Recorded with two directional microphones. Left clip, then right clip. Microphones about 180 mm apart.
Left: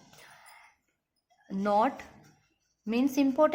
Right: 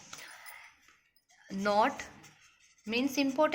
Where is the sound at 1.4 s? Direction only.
25° left (ahead or behind).